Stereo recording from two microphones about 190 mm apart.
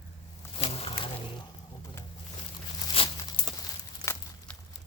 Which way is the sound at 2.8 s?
25° left (ahead or behind).